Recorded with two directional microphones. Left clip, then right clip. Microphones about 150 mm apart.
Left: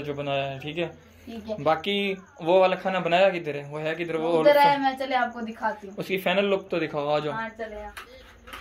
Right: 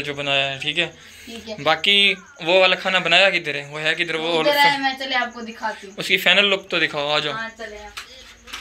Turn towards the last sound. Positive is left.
turn(degrees=5)  # may be behind; listen again after turning